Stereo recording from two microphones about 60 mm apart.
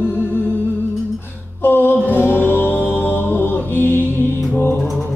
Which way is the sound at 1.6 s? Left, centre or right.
Left.